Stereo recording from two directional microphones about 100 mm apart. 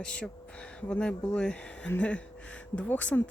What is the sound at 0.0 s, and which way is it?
Speech, 10° left (ahead or behind).